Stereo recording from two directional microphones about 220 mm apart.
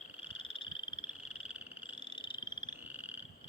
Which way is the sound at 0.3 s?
25° left (ahead or behind).